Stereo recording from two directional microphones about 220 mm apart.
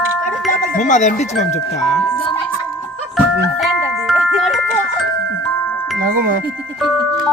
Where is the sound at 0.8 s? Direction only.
35° left (ahead or behind).